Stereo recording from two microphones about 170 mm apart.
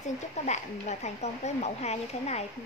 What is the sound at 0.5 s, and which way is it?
Speech, 40° left (ahead or behind).